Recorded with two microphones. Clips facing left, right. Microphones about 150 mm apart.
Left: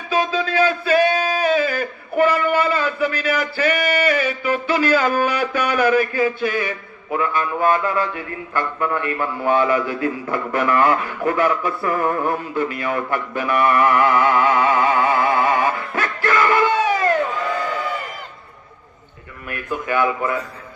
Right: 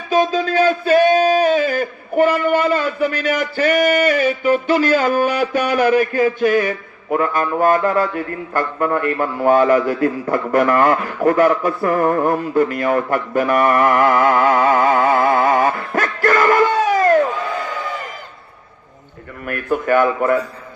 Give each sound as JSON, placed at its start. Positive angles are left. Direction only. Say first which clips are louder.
{"t": 0.1, "sound": "a sound", "louder": "right 4 dB", "side_deg": -40}
{"t": 5.2, "sound": "a man's voice", "louder": "right 3 dB", "side_deg": -40}
{"t": 19.4, "sound": "a man's voice", "louder": "right 6 dB", "side_deg": -50}